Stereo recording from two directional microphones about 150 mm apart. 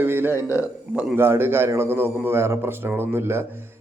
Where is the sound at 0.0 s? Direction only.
15° right (ahead or behind).